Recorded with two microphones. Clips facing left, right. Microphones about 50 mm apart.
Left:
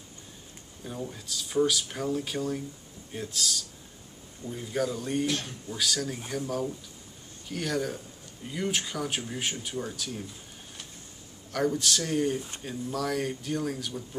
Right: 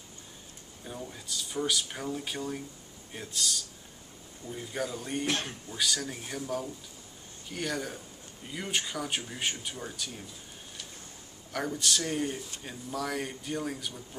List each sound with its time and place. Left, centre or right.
0.8 s speech: centre
5.2 s speech: right
5.7 s speech: centre
7.4 s speech: centre
11.5 s speech: centre